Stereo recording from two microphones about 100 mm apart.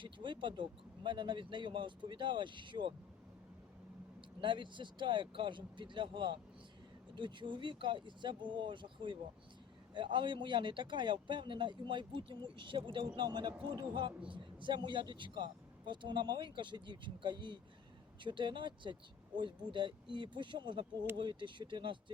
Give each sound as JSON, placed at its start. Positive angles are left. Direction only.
{"t": 0.0, "sound": "speech", "side_deg": -55}
{"t": 4.4, "sound": "speech", "side_deg": -50}